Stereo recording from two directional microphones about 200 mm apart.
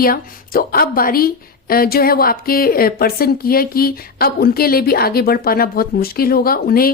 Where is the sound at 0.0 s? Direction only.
45° left (ahead or behind).